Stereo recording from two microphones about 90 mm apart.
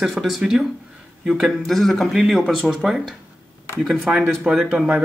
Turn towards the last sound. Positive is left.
turn(degrees=-10)  # may be behind; listen again after turning